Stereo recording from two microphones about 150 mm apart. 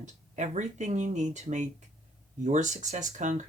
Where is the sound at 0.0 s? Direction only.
50° right (ahead or behind).